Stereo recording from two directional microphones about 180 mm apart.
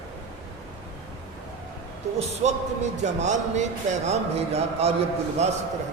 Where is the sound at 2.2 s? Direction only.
40° right (ahead or behind).